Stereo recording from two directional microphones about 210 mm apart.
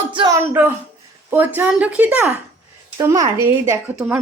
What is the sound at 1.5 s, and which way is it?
A woman's voice, 5° right (ahead or behind).